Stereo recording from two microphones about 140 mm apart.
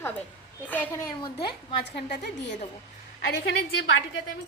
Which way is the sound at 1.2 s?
35° left (ahead or behind).